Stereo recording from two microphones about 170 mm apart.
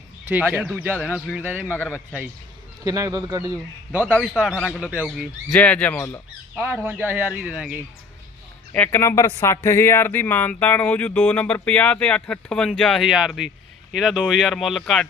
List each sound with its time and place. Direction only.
0.3 s a man's voice: 10° right (ahead or behind)
2.8 s a man's voice: 20° right (ahead or behind)
4.0 s speech: 10° left (ahead or behind)
4.4 s speech: 5° right (ahead or behind)
5.5 s speech: 10° left (ahead or behind)
6.6 s a man's voice: 10° right (ahead or behind)
8.7 s speech: 10° left (ahead or behind)